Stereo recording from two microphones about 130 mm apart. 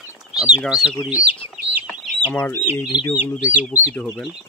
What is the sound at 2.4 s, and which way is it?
Speech, 20° left (ahead or behind).